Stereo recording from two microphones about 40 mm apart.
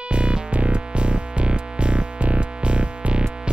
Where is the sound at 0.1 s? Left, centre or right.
Right.